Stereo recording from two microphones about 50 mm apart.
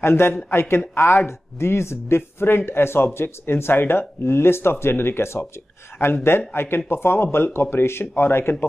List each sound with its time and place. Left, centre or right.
0.0 s speech: left